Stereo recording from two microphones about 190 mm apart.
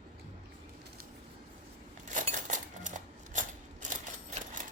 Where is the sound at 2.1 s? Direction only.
40° right (ahead or behind).